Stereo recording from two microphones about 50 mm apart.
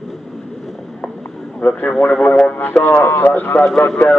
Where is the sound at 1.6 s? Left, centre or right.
Left.